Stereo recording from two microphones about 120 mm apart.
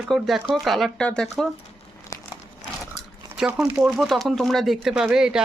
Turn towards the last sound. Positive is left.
turn(degrees=-5)  # may be behind; listen again after turning